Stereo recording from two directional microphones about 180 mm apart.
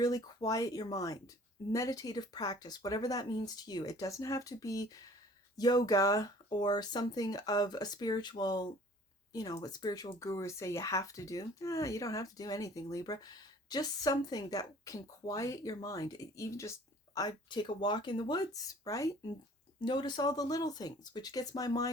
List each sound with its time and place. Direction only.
0.0 s speech: 20° left (ahead or behind)